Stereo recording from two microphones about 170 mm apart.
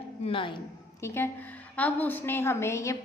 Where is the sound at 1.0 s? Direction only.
15° left (ahead or behind).